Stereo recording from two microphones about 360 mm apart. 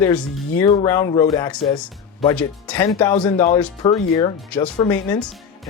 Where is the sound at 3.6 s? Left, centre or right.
Centre.